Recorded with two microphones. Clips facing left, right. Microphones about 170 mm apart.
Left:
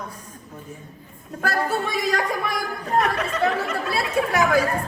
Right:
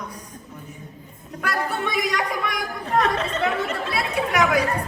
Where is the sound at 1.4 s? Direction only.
35° left (ahead or behind).